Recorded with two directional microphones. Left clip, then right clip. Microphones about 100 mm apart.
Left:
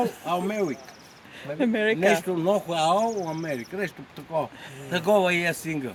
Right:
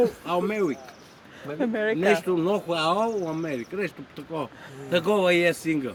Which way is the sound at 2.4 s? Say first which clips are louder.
Left 1 dB; 40° left (ahead or behind).